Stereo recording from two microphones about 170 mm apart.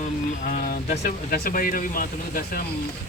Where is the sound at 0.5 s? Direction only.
50° left (ahead or behind).